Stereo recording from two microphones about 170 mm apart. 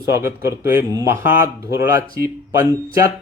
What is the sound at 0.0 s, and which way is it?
Speech, 15° right (ahead or behind).